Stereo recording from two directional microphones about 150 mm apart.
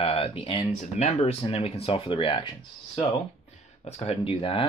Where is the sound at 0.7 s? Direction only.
50° left (ahead or behind); by 3.0 s 30° left (ahead or behind).